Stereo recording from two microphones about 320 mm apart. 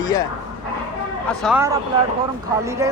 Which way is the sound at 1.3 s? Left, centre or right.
Centre.